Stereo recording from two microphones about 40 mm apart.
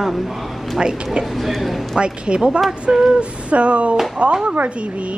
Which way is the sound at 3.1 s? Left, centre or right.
Right.